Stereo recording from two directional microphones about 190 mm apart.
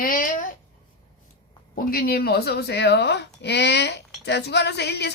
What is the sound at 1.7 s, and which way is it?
Speech, 55° left (ahead or behind).